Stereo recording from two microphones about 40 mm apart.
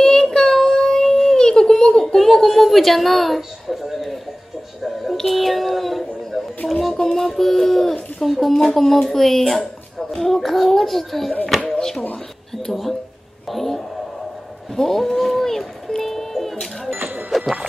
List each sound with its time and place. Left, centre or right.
0.0 s child singing: centre
1.4 s a sound: centre
5.1 s a child's voice: centre
7.0 s speech: centre
7.2 s a child's voice: centre
13.5 s a child's voice: centre
16.9 s music: right